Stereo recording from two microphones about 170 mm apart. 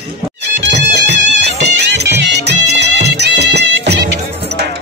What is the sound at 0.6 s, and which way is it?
Music, 90° right.